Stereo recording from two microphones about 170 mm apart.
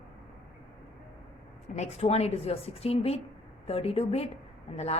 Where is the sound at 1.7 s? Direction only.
40° left (ahead or behind).